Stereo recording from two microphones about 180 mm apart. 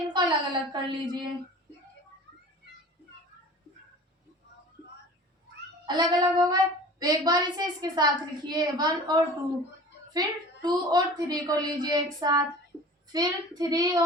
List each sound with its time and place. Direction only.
0.1 s a woman's voice: 25° right (ahead or behind)
5.8 s a woman's voice: 25° right (ahead or behind)